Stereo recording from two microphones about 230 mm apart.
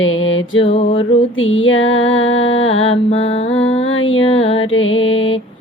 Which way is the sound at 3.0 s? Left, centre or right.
Left.